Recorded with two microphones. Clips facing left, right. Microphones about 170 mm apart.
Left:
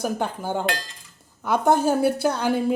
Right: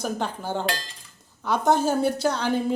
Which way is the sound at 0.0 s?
10° left (ahead or behind).